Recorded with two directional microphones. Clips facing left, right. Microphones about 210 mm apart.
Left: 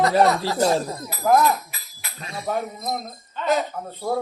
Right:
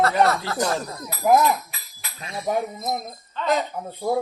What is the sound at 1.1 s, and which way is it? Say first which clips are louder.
Speech: right 1 dB; 15° right (ahead or behind).